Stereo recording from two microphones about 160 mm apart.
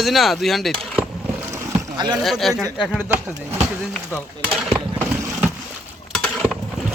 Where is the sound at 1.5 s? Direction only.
25° right (ahead or behind).